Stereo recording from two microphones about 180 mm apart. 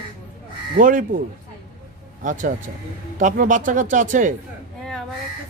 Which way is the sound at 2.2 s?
45° right (ahead or behind).